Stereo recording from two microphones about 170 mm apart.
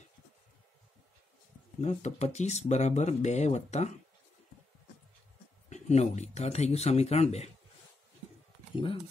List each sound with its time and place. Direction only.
1.8 s speech: 40° left (ahead or behind)
5.7 s speech: 40° left (ahead or behind)
8.7 s speech: 30° left (ahead or behind)